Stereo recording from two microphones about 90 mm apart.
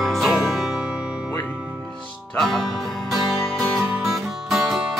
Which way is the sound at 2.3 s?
Centre (ahead or behind).